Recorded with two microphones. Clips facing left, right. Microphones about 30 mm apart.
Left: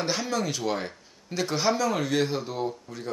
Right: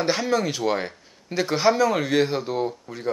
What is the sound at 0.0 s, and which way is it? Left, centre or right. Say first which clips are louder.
Speech: right 5 dB; centre.